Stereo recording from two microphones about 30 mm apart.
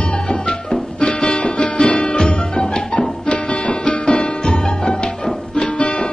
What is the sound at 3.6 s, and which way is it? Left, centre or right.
Music, left.